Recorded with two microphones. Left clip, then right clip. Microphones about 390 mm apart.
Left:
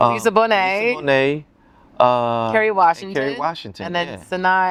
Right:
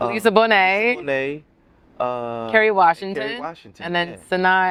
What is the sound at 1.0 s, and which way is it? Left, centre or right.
Speech, left.